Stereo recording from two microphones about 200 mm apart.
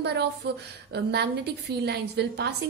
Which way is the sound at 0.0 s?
55° right (ahead or behind).